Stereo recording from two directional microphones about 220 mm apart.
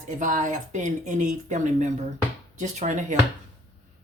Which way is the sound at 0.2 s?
35° right (ahead or behind).